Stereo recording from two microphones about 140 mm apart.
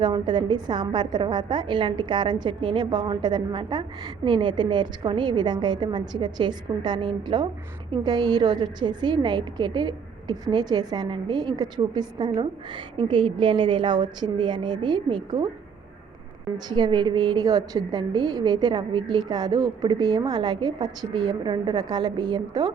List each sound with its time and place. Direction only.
0.0 s a woman's voice: 30° right (ahead or behind)
16.6 s a woman's voice: 30° right (ahead or behind)